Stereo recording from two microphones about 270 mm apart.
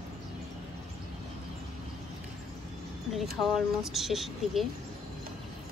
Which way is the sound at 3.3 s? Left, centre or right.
Centre.